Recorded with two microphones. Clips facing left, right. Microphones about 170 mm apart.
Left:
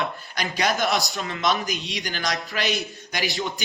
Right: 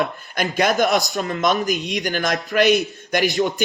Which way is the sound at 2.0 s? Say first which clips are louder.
Right 6 dB; 45° right (ahead or behind).